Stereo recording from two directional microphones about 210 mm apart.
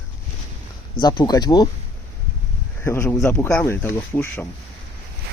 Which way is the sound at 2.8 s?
10° left (ahead or behind).